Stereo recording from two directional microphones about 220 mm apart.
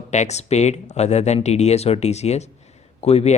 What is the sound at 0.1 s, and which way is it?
Speech, 30° left (ahead or behind).